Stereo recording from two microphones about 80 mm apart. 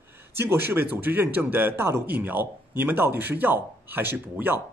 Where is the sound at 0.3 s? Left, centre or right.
Right.